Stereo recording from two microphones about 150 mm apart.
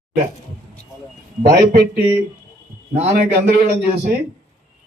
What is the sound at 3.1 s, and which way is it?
Speech, 90° right.